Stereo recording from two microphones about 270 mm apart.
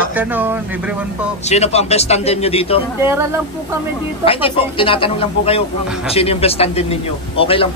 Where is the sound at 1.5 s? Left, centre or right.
Left.